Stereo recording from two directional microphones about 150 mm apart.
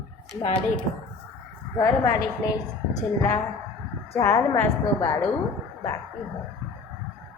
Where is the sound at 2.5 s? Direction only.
25° left (ahead or behind).